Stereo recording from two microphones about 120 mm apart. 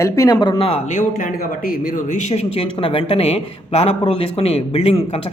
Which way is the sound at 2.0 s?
70° left (ahead or behind).